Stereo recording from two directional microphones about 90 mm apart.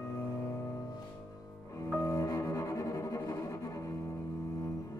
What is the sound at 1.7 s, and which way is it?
Cello, 40° left (ahead or behind).